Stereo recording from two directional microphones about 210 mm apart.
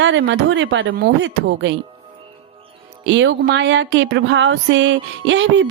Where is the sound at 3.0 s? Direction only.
60° right (ahead or behind).